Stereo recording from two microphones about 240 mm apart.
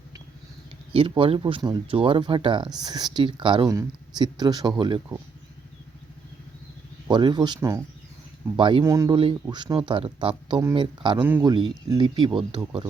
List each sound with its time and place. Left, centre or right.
0.9 s speech: right
7.1 s speech: centre
11.2 s speech: centre
11.5 s speech: centre